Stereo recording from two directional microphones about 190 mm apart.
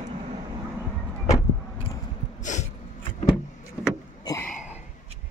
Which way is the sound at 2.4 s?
40° left (ahead or behind).